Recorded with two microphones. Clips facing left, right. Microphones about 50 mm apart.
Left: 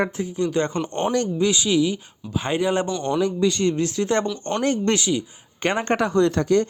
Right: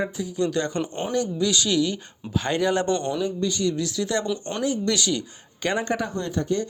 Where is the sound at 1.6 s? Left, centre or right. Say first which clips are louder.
Left 3 dB; centre.